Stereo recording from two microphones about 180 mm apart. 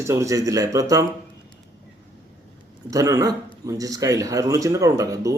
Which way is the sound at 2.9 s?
20° right (ahead or behind).